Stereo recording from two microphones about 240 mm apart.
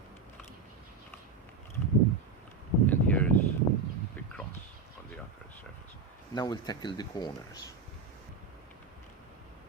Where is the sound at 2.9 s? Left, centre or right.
Centre.